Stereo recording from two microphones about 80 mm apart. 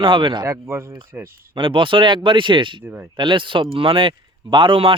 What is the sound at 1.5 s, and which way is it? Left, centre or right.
Speech, right.